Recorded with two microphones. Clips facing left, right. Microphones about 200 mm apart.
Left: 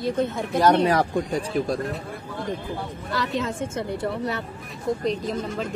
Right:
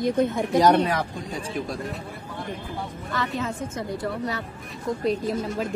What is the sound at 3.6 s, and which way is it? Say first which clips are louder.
Speech: left 2 dB; 30° left (ahead or behind).